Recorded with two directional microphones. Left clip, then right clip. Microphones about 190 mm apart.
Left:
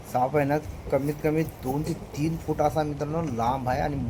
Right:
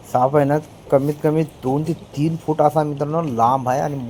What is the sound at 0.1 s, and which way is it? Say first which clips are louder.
Speech: right 8 dB; 25° right (ahead or behind).